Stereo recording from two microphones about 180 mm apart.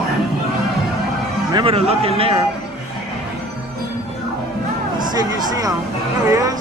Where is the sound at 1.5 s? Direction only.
30° right (ahead or behind).